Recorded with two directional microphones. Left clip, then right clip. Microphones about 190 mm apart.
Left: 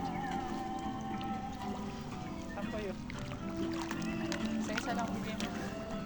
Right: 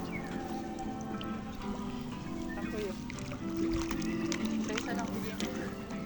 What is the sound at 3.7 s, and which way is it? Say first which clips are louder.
Music: right 3 dB; 5° left (ahead or behind).